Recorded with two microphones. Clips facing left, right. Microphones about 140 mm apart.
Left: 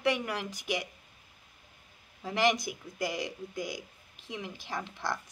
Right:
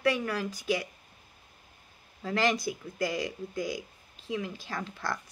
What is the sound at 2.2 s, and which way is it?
A woman's voice, 15° left (ahead or behind).